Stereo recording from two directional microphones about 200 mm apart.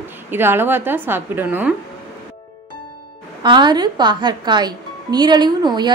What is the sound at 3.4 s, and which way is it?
Speech, 20° right (ahead or behind).